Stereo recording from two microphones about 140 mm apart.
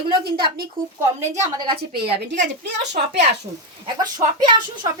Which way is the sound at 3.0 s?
80° right.